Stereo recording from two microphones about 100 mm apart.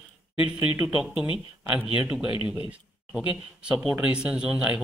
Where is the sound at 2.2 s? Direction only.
60° left (ahead or behind).